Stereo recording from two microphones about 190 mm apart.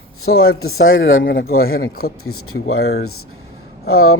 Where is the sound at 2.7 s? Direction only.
90° left.